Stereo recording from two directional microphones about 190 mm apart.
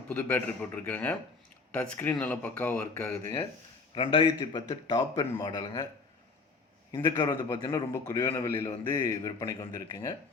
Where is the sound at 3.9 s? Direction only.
25° left (ahead or behind).